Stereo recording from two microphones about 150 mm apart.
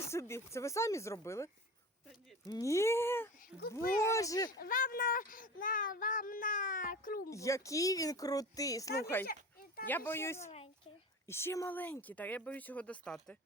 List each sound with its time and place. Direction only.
0.1 s speech: 20° left (ahead or behind)
2.5 s speech: 20° left (ahead or behind)
3.8 s speech: 80° left
4.0 s speech: 20° left (ahead or behind)
4.5 s a child's voice: 75° left (ahead or behind)
7.3 s speech: 20° left (ahead or behind)
9.2 s a sound: 75° left (ahead or behind)
9.8 s speech: 15° left (ahead or behind)